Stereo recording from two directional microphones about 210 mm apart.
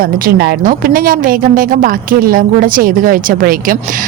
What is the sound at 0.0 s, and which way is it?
A woman's voice, 45° right (ahead or behind).